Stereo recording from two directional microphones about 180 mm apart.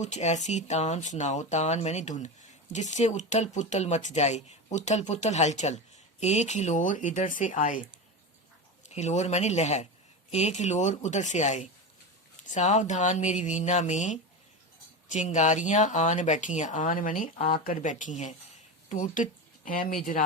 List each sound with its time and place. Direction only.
0.0 s speech: 40° left (ahead or behind)
9.0 s speech: 40° left (ahead or behind)